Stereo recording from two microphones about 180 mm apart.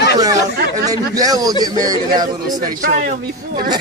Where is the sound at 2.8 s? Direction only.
50° right (ahead or behind).